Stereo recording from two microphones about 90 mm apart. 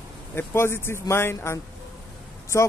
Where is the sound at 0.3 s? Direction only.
25° left (ahead or behind).